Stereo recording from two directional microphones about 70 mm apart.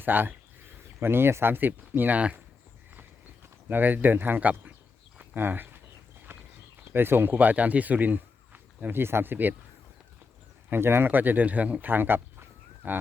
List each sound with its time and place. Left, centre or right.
0.0 s speech: right
3.7 s speech: right
5.1 s a sound: right
6.9 s speech: right
10.7 s speech: right
11.9 s a sound: right